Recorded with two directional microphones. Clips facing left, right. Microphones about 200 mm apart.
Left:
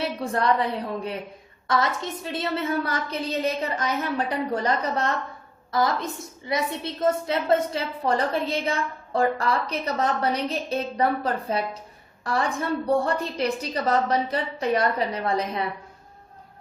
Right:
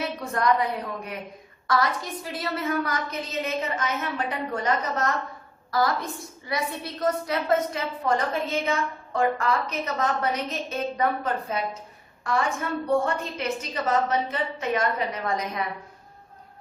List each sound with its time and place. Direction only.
0.0 s a woman's voice: 30° left (ahead or behind)
5.7 s a woman's voice: 20° left (ahead or behind)